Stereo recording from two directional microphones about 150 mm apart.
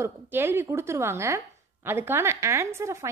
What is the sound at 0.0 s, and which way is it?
Speech, 15° right (ahead or behind).